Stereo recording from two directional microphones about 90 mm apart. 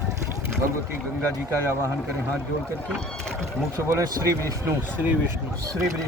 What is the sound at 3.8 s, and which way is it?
Speech, 40° right (ahead or behind).